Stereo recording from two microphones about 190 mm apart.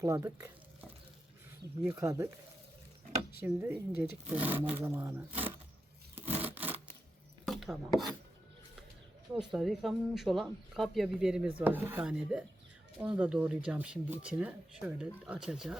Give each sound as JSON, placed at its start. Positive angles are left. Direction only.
{"t": 0.0, "sound": "speech", "side_deg": -15}
{"t": 1.9, "sound": "speech", "side_deg": -15}
{"t": 3.4, "sound": "speech", "side_deg": -10}
{"t": 6.1, "sound": "a sound", "side_deg": -10}
{"t": 7.4, "sound": "chopping", "side_deg": 0}
{"t": 9.4, "sound": "speech", "side_deg": 0}